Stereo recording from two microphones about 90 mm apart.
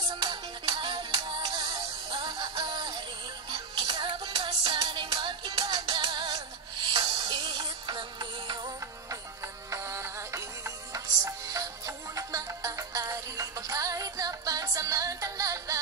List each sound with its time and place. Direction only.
0.1 s music: 50° right (ahead or behind); by 1.4 s 70° right (ahead or behind)
2.1 s music: 50° right (ahead or behind)
9.7 s music: 35° right (ahead or behind)